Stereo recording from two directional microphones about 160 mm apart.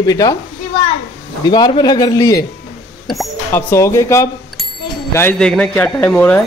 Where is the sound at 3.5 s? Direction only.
15° left (ahead or behind).